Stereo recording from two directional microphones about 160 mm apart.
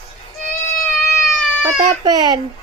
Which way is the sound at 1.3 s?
5° left (ahead or behind).